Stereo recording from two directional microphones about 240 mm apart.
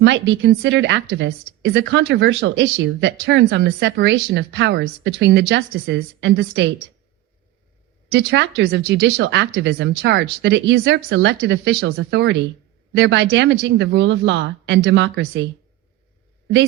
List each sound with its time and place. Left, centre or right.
0.0 s speech: right
8.1 s speech: right